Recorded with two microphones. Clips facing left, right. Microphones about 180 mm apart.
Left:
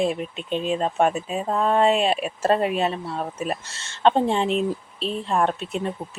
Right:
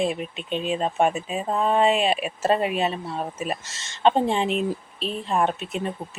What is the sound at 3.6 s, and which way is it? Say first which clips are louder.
Speech: left 1 dB; 35° left (ahead or behind).